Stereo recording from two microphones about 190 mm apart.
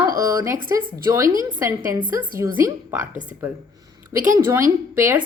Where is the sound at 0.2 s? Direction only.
15° right (ahead or behind).